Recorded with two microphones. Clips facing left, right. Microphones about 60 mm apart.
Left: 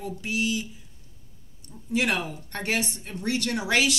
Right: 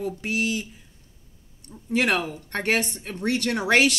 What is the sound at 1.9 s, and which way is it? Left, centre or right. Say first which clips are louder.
A woman's voice: right 3 dB; right.